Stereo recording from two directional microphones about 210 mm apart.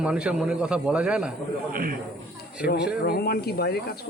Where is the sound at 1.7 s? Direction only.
45° right (ahead or behind).